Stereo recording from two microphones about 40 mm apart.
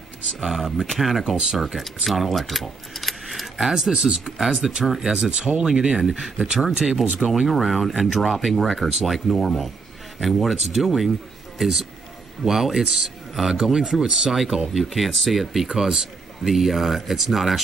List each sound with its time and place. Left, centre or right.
0.4 s speech: centre
3.9 s speech: centre
5.1 s speech: right
5.6 s speech: centre
12.4 s speech: centre
14.3 s speech: centre
15.7 s speech: centre